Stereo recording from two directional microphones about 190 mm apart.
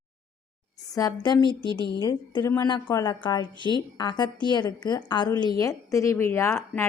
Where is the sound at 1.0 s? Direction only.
20° left (ahead or behind).